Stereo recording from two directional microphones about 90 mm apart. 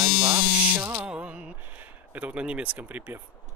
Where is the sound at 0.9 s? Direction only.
10° right (ahead or behind).